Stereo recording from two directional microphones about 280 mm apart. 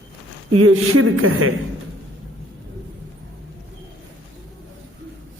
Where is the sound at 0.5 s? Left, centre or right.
Right.